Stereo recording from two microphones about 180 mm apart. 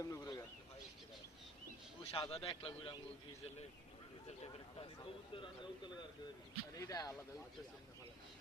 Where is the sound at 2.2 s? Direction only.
30° left (ahead or behind).